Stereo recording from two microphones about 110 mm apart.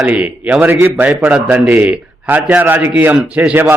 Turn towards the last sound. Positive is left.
turn(degrees=-15)  # may be behind; listen again after turning